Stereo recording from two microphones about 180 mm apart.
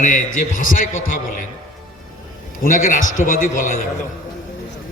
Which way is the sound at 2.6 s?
45° left (ahead or behind).